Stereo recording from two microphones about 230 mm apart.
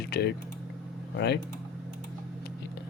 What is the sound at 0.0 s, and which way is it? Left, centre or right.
Speech, left.